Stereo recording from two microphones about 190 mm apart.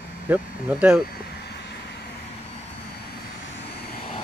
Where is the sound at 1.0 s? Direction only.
60° left (ahead or behind).